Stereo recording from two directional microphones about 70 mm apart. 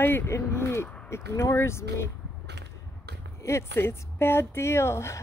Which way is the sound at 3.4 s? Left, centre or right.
Left.